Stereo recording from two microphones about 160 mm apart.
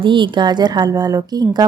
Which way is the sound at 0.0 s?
30° right (ahead or behind).